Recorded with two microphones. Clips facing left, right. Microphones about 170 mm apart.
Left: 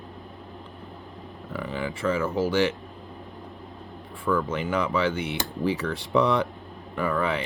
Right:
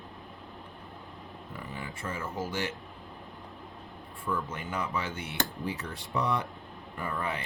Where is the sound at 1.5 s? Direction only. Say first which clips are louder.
Left 11 dB; 90° left.